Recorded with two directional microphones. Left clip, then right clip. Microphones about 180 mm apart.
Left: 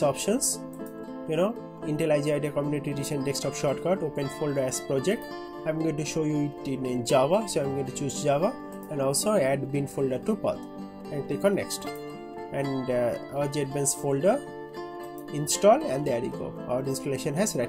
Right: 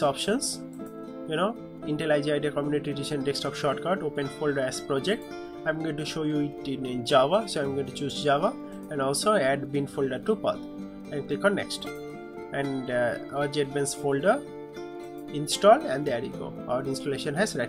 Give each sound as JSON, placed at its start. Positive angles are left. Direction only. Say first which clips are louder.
{"t": 0.0, "sound": "speech", "louder": "even", "side_deg": 30}